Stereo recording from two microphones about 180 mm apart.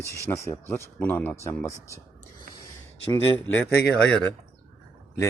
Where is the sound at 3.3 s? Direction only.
10° left (ahead or behind).